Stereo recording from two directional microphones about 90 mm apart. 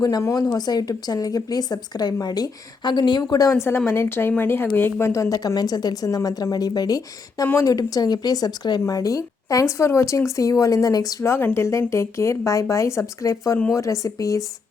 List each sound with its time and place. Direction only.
0.0 s a woman's voice: 40° left (ahead or behind)
8.8 s a woman's voice: 40° left (ahead or behind)
11.2 s a woman's voice: 25° left (ahead or behind)